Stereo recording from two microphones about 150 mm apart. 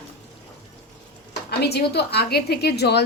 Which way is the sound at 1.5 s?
90° left.